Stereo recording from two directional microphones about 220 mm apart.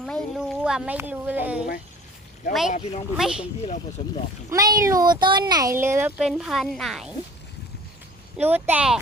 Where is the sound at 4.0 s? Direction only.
30° left (ahead or behind).